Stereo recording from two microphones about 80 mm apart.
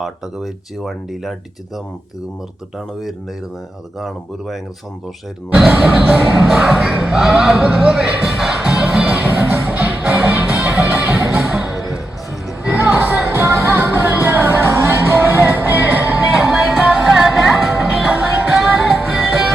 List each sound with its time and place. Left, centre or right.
0.0 s speech: centre
4.0 s speech: centre
5.5 s music: centre
6.4 s speech: centre
8.2 s music: centre
9.1 s music: right
11.3 s music: centre
12.6 s music: centre